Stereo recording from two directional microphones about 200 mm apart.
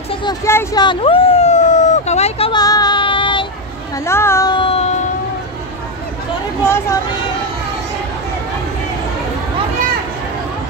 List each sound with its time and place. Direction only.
0.1 s a sound: 20° left (ahead or behind)
3.9 s speech: 15° left (ahead or behind); by 4.9 s 30° left (ahead or behind)
6.6 s speech: 15° left (ahead or behind)